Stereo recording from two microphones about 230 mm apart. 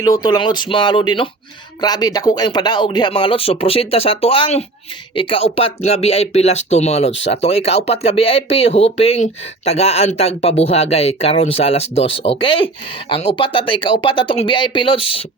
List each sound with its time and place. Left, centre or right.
0.0 s speech: centre